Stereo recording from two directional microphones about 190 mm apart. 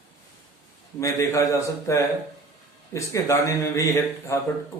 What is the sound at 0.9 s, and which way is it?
A man's voice, 15° left (ahead or behind).